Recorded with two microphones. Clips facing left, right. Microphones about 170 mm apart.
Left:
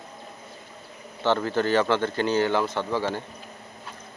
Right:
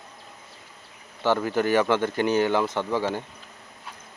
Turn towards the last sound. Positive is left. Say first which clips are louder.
# right 1 dB
turn(degrees=-15)  # may be behind; listen again after turning